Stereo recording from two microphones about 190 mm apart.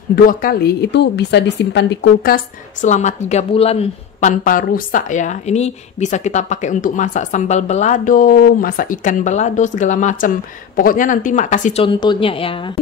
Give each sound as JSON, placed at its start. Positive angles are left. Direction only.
{"t": 0.1, "sound": "a woman's voice", "side_deg": 50}
{"t": 11.8, "sound": "a woman's voice", "side_deg": 25}